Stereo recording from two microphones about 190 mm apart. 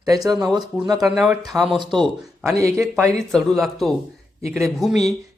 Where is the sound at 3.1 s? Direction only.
5° left (ahead or behind).